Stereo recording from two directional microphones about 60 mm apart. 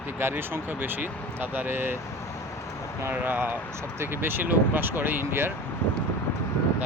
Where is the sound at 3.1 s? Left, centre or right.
Right.